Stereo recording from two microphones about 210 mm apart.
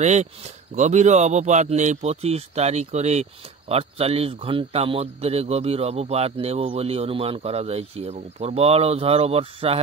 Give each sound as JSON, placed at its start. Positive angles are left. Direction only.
{"t": 0.0, "sound": "speech", "side_deg": -35}